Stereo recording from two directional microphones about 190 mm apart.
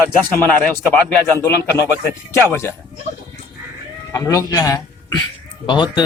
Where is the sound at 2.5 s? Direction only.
10° left (ahead or behind).